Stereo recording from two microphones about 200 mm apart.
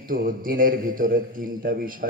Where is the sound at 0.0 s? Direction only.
45° right (ahead or behind).